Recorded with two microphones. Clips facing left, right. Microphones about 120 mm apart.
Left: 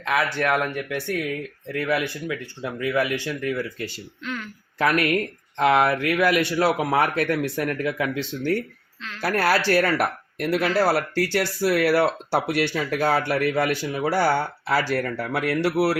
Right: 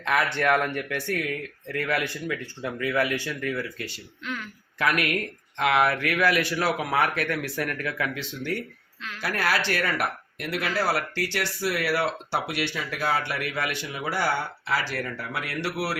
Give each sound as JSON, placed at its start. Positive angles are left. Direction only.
{"t": 0.0, "sound": "speech", "side_deg": 0}
{"t": 3.8, "sound": "speech", "side_deg": -5}
{"t": 4.8, "sound": "speech", "side_deg": 30}
{"t": 9.2, "sound": "speech", "side_deg": 35}